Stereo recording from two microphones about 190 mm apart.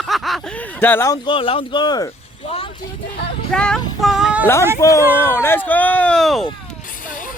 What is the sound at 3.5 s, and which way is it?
Speech, 5° left (ahead or behind).